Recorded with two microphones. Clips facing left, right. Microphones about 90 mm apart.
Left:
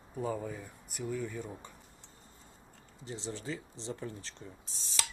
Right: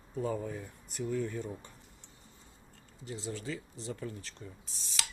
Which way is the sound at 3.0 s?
30° left (ahead or behind).